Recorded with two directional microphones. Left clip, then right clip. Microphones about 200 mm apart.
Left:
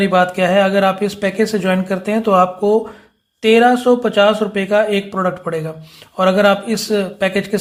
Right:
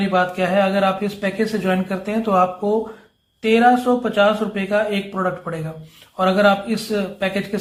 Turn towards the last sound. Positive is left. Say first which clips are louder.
# left 5 dB
turn(degrees=40)  # may be behind; listen again after turning